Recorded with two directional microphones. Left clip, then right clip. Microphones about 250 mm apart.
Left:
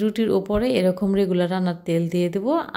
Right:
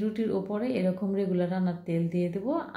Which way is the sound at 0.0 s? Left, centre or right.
Left.